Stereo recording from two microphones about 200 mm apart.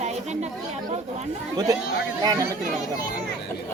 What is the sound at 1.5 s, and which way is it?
Speech, 15° right (ahead or behind).